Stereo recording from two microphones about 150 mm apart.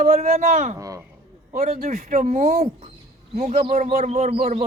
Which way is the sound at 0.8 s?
20° right (ahead or behind).